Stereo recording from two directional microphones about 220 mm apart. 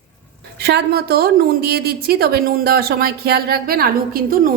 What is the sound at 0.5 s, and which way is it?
A woman's voice, 45° right (ahead or behind).